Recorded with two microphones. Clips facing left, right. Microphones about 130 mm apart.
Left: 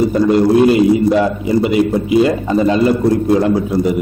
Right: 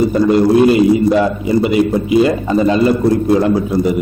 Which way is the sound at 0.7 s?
15° right (ahead or behind).